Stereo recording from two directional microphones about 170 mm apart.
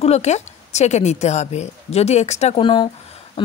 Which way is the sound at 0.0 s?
40° left (ahead or behind).